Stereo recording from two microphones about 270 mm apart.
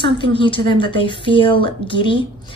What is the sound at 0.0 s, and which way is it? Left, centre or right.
A woman's voice, centre.